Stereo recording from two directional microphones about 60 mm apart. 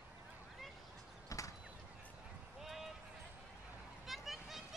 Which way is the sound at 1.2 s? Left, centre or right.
Left.